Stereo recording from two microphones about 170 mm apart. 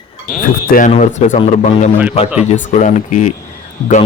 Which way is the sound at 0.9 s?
45° left (ahead or behind).